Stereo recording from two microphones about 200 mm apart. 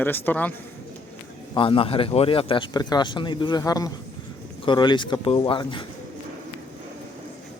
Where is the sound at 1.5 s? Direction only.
25° left (ahead or behind).